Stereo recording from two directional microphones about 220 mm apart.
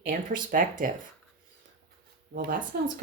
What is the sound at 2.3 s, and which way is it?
Speech, 40° right (ahead or behind).